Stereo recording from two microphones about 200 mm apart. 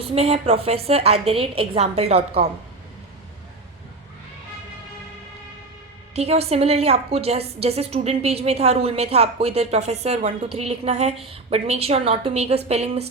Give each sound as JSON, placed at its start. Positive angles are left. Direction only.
{"t": 0.0, "sound": "a woman's voice", "side_deg": -30}
{"t": 6.1, "sound": "a woman's voice", "side_deg": -30}